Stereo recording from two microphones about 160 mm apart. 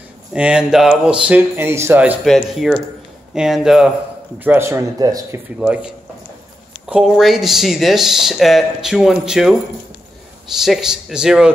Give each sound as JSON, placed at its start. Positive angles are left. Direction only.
{"t": 0.3, "sound": "a man's voice", "side_deg": -5}
{"t": 2.2, "sound": "speech", "side_deg": 0}
{"t": 4.4, "sound": "speech", "side_deg": -15}
{"t": 5.6, "sound": "a man's voice", "side_deg": -5}
{"t": 6.9, "sound": "speech", "side_deg": -5}